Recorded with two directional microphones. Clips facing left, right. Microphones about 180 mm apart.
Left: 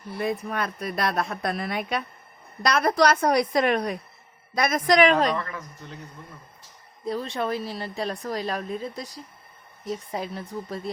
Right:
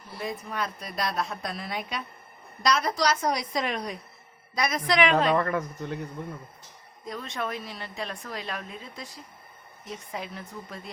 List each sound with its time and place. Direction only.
0.2 s a woman's voice: 60° left (ahead or behind); by 5.3 s 40° left (ahead or behind)
5.4 s speech: 55° right (ahead or behind)
7.0 s a woman's voice: 30° left (ahead or behind)